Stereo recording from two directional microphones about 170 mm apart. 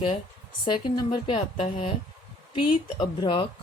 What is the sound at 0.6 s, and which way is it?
A woman's voice, 30° left (ahead or behind).